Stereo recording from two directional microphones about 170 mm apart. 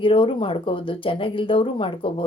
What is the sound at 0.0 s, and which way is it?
Speech, 30° left (ahead or behind).